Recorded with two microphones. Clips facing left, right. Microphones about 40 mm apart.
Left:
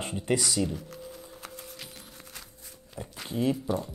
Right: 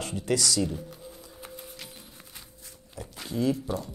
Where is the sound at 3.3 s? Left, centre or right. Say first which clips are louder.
Right 1 dB; left.